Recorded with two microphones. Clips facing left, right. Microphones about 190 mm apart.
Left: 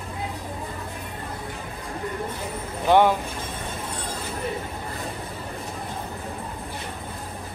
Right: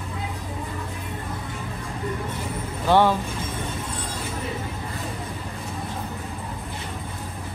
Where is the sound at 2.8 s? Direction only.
15° left (ahead or behind).